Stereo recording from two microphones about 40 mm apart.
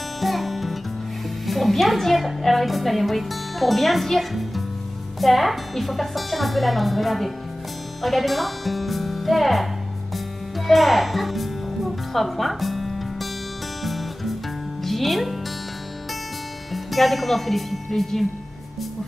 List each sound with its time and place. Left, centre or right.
0.2 s music: centre
1.4 s a woman's voice: centre
10.7 s music: centre
14.8 s speech: centre
16.7 s speech: centre